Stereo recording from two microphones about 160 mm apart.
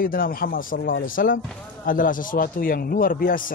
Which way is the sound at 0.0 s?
65° left (ahead or behind).